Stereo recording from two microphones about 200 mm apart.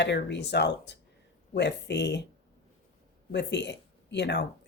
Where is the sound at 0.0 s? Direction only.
60° left (ahead or behind).